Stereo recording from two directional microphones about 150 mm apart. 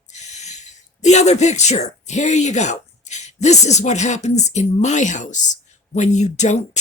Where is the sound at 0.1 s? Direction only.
50° left (ahead or behind).